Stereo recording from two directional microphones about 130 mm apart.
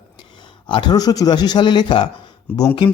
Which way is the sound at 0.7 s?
35° left (ahead or behind).